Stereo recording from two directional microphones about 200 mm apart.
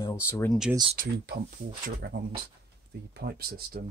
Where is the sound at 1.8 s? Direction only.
50° right (ahead or behind).